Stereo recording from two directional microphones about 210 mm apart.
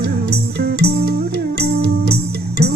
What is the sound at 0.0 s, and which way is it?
Music, 50° right (ahead or behind).